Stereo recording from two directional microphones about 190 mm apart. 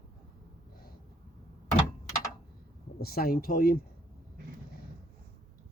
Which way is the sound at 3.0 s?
55° left (ahead or behind).